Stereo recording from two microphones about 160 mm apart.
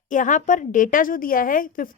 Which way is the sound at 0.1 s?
55° left (ahead or behind).